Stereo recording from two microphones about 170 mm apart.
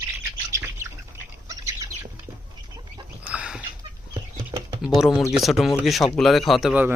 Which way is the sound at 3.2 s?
5° right (ahead or behind).